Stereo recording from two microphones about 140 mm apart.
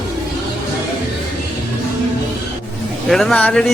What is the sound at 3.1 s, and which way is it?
Speech, centre (ahead or behind).